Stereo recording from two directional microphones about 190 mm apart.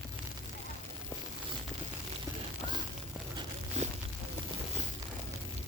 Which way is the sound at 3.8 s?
35° right (ahead or behind).